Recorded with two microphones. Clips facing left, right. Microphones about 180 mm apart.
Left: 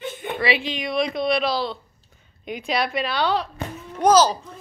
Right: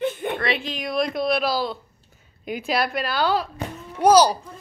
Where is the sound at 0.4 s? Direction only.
Centre (ahead or behind).